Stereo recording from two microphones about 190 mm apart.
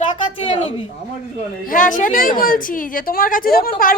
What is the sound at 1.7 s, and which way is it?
A woman's voice, 45° left (ahead or behind).